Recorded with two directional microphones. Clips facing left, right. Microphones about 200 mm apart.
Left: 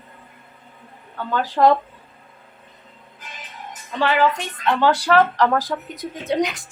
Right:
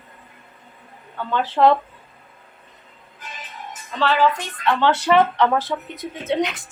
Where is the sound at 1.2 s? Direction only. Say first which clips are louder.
Even; 10° left (ahead or behind).